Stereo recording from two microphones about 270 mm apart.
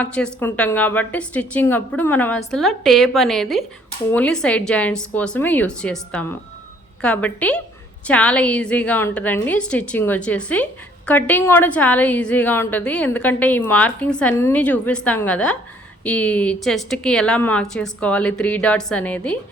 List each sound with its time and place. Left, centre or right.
0.0 s a woman's voice: centre